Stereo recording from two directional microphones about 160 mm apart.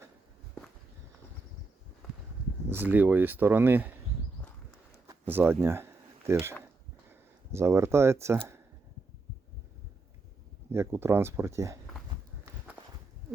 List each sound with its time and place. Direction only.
2.6 s speech: 10° right (ahead or behind)
5.0 s a sound: 15° right (ahead or behind)
6.4 s speech: 15° right (ahead or behind)
10.7 s speech: 15° right (ahead or behind)